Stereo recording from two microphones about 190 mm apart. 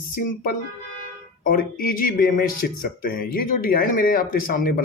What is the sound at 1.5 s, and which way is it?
Speech, 45° left (ahead or behind).